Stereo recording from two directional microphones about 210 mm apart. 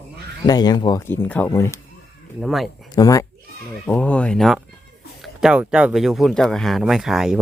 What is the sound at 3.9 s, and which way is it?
Speech, 5° left (ahead or behind).